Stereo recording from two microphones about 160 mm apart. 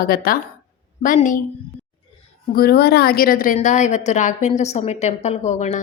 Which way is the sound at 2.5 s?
75° left (ahead or behind).